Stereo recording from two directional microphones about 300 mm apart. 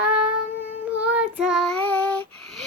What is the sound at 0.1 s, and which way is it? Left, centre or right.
Child singing, centre.